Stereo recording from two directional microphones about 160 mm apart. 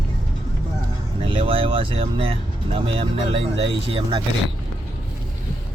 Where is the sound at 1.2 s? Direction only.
35° right (ahead or behind).